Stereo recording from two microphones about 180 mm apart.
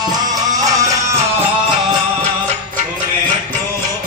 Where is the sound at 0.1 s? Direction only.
20° right (ahead or behind).